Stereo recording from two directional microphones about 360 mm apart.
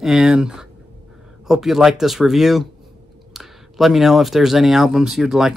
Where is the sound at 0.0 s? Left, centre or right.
Centre.